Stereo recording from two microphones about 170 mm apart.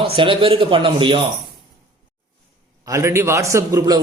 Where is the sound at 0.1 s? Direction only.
30° right (ahead or behind).